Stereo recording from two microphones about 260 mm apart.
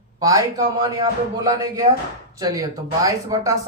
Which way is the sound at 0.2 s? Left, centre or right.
Centre.